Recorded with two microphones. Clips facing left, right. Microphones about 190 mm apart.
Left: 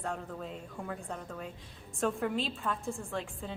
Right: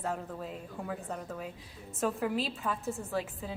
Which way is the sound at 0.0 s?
5° right (ahead or behind).